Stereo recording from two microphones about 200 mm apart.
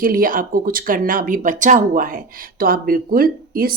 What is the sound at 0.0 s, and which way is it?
Speech, 45° right (ahead or behind).